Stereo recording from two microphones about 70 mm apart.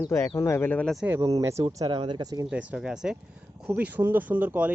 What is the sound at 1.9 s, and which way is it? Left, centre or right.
Speech, right.